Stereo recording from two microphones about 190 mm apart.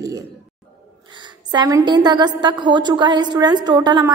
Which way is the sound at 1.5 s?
20° right (ahead or behind).